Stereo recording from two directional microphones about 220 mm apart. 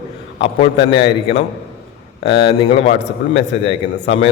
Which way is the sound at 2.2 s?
25° left (ahead or behind).